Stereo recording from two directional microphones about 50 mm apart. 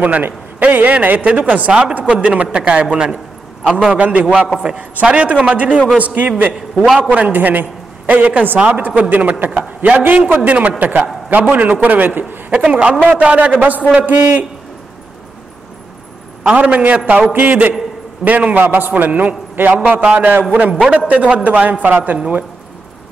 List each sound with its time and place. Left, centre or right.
0.0 s a man's voice: right
12.5 s a man's voice: right
16.5 s a man's voice: right
20.5 s a man's voice: right